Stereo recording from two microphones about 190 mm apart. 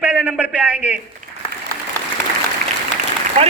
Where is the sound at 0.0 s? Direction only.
10° right (ahead or behind).